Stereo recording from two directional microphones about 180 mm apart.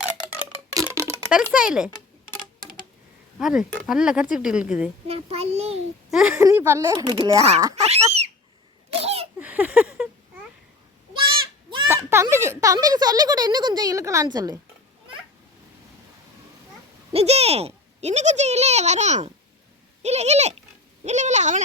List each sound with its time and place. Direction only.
0.7 s a sound: 20° right (ahead or behind)
1.3 s speech: 5° right (ahead or behind)
3.3 s speech: centre (ahead or behind)
5.0 s speech: 35° right (ahead or behind)
6.1 s speech: 5° right (ahead or behind)
6.4 s speech: 15° right (ahead or behind)
6.9 s speech: 25° right (ahead or behind)
8.9 s a sound: 35° right (ahead or behind)
9.4 s a sound: 10° right (ahead or behind)
11.9 s speech: 15° right (ahead or behind)
17.1 s speech: 35° right (ahead or behind)